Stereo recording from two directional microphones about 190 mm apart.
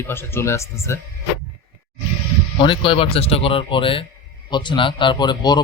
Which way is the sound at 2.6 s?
25° left (ahead or behind).